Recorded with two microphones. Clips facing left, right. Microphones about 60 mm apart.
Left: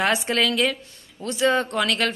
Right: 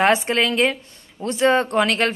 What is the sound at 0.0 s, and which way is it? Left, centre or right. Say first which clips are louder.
A woman's voice: right 4 dB; right.